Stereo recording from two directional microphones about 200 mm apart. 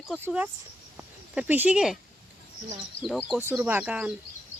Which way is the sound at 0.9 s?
10° right (ahead or behind).